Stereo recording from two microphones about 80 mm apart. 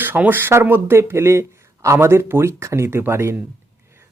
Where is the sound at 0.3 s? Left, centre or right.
Right.